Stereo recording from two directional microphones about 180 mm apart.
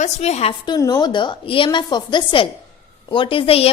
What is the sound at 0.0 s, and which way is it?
Speech, 35° left (ahead or behind).